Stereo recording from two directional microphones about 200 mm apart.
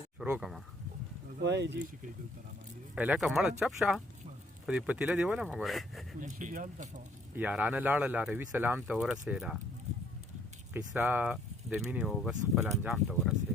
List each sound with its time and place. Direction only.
0.2 s speech: 5° right (ahead or behind)
1.4 s speech: 60° right (ahead or behind)
2.9 s speech: 5° right (ahead or behind)
6.1 s speech: 40° right (ahead or behind)
7.3 s speech: 5° right (ahead or behind)
10.9 s speech: 5° right (ahead or behind)
12.6 s speech: 15° right (ahead or behind)
12.9 s speech: 5° right (ahead or behind)